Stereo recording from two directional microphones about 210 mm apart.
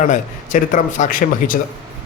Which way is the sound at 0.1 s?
40° left (ahead or behind).